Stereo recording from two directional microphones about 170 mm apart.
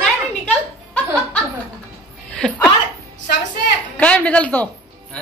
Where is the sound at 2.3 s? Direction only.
5° left (ahead or behind).